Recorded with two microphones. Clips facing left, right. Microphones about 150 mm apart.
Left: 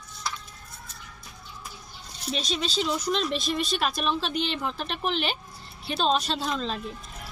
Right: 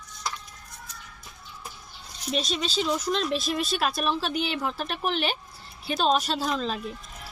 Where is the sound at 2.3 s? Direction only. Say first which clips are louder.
Right 1 dB; centre (ahead or behind).